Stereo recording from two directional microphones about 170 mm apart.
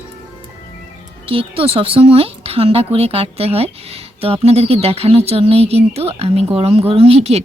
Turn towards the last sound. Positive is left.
turn(degrees=-35)  # may be behind; listen again after turning